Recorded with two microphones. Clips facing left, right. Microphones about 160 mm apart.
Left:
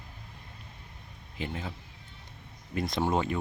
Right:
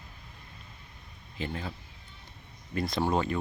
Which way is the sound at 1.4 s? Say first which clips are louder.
Right 1 dB; 15° left (ahead or behind).